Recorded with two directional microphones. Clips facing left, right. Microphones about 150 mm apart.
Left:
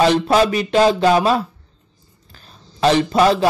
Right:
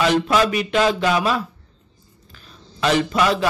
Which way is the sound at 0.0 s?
35° left (ahead or behind).